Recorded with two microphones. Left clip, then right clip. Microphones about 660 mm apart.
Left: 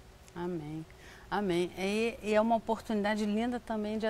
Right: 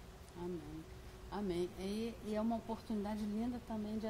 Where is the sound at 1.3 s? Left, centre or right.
Left.